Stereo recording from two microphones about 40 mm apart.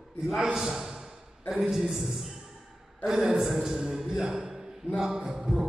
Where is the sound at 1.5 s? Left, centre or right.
Centre.